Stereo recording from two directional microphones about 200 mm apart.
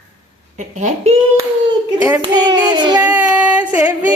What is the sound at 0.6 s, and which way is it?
Speech, 35° right (ahead or behind).